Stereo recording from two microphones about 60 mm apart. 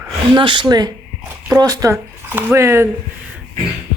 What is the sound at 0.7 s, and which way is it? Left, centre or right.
Speech, right.